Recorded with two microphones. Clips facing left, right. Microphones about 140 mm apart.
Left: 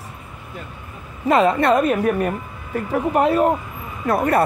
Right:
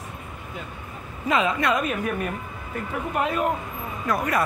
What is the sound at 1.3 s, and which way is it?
Speech, 40° left (ahead or behind).